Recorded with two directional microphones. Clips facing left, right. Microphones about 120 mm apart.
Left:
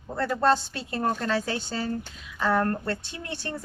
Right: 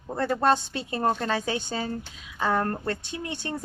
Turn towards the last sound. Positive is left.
turn(degrees=-15)  # may be behind; listen again after turning